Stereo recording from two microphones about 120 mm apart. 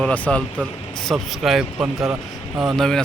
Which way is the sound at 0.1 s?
10° left (ahead or behind).